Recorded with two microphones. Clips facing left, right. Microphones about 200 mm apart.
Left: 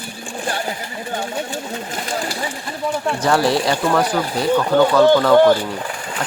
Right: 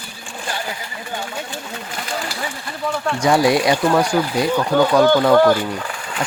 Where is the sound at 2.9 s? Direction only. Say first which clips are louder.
Left 1 dB; 15° left (ahead or behind).